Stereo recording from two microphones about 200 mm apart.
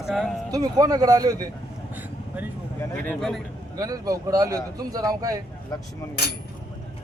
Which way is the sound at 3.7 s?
20° right (ahead or behind).